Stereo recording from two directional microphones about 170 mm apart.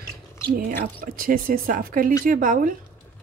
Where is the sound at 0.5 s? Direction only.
55° right (ahead or behind).